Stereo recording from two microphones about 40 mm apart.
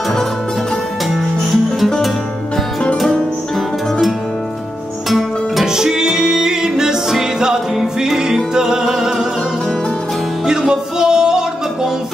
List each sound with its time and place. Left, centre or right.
5.7 s music: centre
10.4 s music: centre